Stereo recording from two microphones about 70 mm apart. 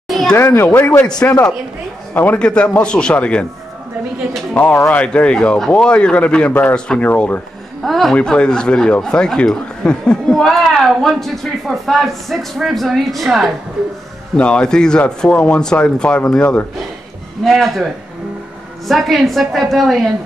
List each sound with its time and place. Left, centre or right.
0.1 s a sound: centre
0.4 s speech: left
1.0 s speech: centre
2.3 s speech: centre
4.9 s speech: centre
7.1 s speech: left
7.8 s speech: centre
8.2 s speech: centre
14.3 s speech: centre
17.5 s speech: centre
18.9 s speech: centre